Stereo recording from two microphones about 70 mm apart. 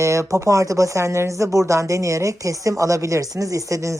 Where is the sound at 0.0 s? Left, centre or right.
Right.